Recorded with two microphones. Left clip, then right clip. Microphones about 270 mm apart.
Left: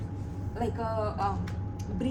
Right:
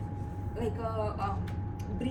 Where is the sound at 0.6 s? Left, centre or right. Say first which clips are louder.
Left 3 dB; centre.